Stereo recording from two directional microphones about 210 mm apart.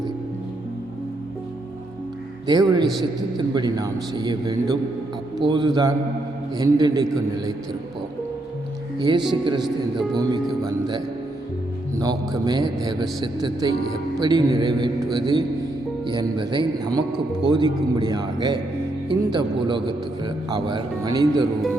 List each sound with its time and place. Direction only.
2.5 s a man's voice: 20° right (ahead or behind)
9.0 s speech: 20° right (ahead or behind)